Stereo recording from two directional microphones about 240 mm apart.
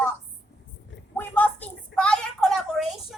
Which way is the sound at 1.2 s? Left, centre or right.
Centre.